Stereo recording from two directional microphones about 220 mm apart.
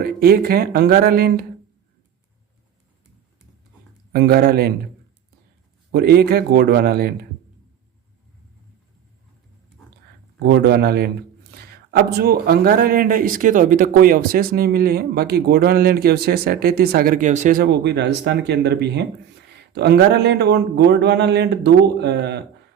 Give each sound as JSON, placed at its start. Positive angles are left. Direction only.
{"t": 0.0, "sound": "speech", "side_deg": -45}
{"t": 4.1, "sound": "speech", "side_deg": -45}
{"t": 5.9, "sound": "speech", "side_deg": -45}
{"t": 10.4, "sound": "speech", "side_deg": -45}